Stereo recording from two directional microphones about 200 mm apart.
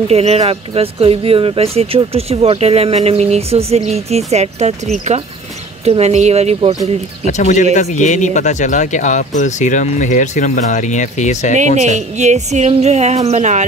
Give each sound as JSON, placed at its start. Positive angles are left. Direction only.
{"t": 0.1, "sound": "speech", "side_deg": -30}
{"t": 7.2, "sound": "speech", "side_deg": 35}
{"t": 11.5, "sound": "speech", "side_deg": -35}